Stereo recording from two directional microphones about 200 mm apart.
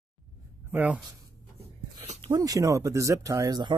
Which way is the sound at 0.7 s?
5° right (ahead or behind).